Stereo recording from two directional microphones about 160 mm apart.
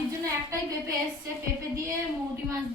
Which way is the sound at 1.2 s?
20° right (ahead or behind).